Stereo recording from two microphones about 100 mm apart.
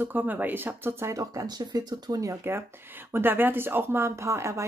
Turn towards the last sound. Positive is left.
turn(degrees=-30)  # may be behind; listen again after turning